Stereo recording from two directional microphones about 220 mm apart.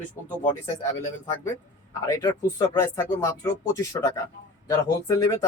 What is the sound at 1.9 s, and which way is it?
Speech, 15° left (ahead or behind).